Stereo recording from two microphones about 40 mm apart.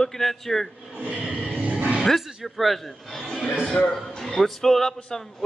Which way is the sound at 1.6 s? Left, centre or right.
Right.